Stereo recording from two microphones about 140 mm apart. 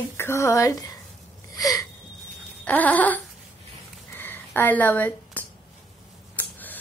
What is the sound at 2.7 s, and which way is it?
Speech, 10° left (ahead or behind).